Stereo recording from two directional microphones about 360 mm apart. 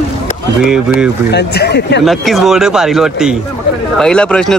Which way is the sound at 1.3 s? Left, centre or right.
Left.